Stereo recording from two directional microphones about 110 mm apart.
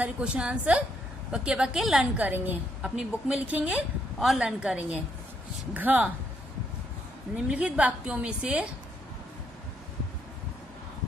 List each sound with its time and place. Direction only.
0.0 s a woman's voice: 10° right (ahead or behind)
2.1 s a woman's voice: 15° right (ahead or behind)
7.4 s a woman's voice: 10° right (ahead or behind)